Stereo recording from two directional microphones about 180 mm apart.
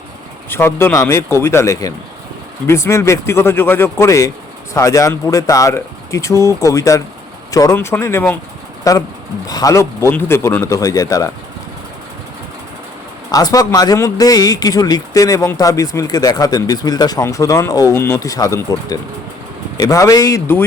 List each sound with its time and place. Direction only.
0.5 s speech: 10° left (ahead or behind)
13.3 s a man's voice: 20° left (ahead or behind)